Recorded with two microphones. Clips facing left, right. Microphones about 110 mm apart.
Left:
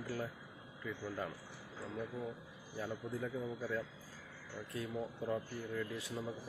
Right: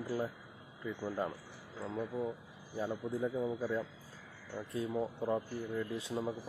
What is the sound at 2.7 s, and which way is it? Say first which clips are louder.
Speech: right 5 dB; 25° right (ahead or behind).